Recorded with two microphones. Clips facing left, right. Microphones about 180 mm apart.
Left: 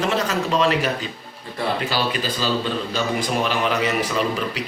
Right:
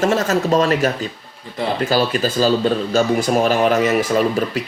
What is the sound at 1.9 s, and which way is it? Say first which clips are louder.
A man's voice: right 7 dB; 45° right (ahead or behind).